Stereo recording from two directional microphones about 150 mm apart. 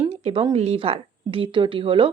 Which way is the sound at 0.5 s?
45° right (ahead or behind).